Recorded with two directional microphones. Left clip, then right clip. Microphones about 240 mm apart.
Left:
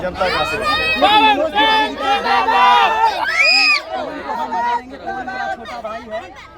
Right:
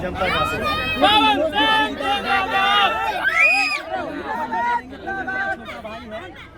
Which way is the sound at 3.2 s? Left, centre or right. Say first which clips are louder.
Left 2 dB; centre.